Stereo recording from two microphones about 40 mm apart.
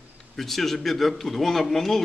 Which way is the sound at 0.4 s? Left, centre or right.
Centre.